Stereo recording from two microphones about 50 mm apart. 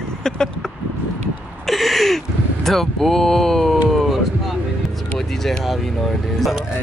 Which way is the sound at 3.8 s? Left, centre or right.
Centre.